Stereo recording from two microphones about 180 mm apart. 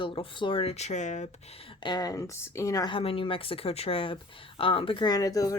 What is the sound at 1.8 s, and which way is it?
Speech, 25° left (ahead or behind).